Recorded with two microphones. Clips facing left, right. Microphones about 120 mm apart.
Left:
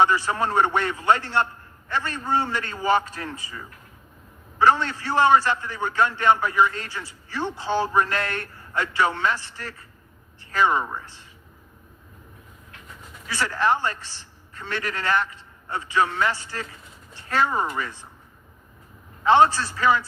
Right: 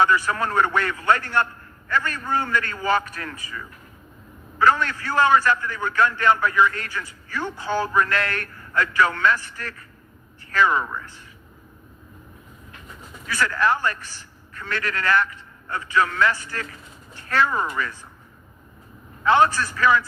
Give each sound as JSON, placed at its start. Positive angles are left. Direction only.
{"t": 0.0, "sound": "a man's voice", "side_deg": 35}
{"t": 10.8, "sound": "a man's voice", "side_deg": 30}
{"t": 13.2, "sound": "a man's voice", "side_deg": 30}
{"t": 19.2, "sound": "a man's voice", "side_deg": 25}